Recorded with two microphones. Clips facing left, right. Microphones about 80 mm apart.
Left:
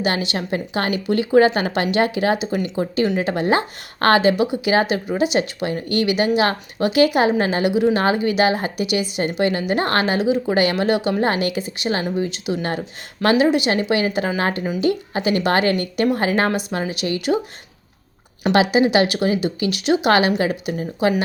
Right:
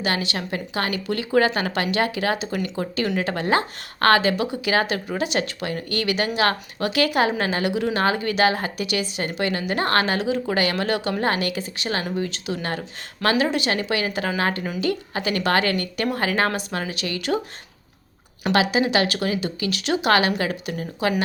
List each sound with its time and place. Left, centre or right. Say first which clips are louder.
0.0 s a woman's voice: left 3 dB; left
18.4 s speech: left 4 dB; left